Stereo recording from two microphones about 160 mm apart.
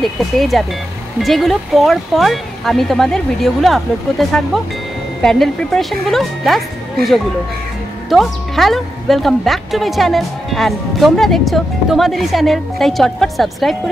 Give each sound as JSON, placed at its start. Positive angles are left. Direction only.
{"t": 0.0, "sound": "a woman's voice", "side_deg": 0}
{"t": 8.1, "sound": "a woman's voice", "side_deg": 0}